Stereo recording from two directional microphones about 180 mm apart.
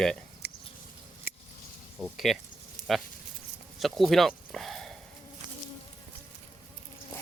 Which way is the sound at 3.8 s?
Centre (ahead or behind).